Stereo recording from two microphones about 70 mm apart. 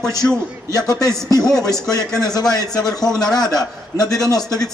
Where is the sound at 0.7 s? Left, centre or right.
Left.